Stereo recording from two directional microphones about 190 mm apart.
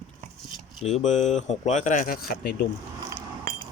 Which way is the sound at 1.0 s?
40° left (ahead or behind).